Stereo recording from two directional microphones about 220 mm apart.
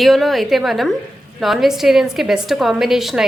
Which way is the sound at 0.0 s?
Centre (ahead or behind).